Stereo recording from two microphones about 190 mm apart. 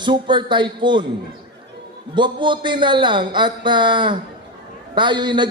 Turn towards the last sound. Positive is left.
turn(degrees=-25)  # may be behind; listen again after turning